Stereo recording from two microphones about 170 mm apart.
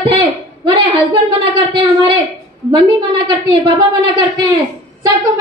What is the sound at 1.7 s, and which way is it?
Speech, 25° right (ahead or behind).